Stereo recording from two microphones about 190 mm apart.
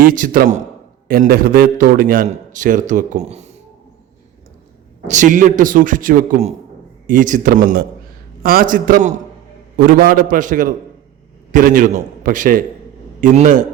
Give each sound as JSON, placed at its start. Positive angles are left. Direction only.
{"t": 0.0, "sound": "a man's voice", "side_deg": -45}
{"t": 5.0, "sound": "a man's voice", "side_deg": -40}